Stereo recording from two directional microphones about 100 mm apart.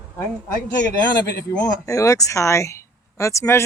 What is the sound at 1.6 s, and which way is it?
Speech, 35° left (ahead or behind).